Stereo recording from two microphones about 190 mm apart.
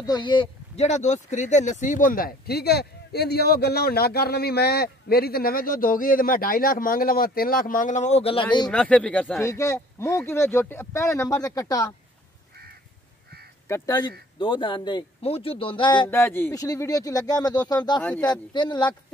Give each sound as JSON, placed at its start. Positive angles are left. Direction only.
{"t": 0.0, "sound": "speech", "side_deg": 20}
{"t": 8.6, "sound": "speech", "side_deg": 5}
{"t": 13.7, "sound": "speech", "side_deg": 15}
{"t": 16.1, "sound": "speech", "side_deg": 10}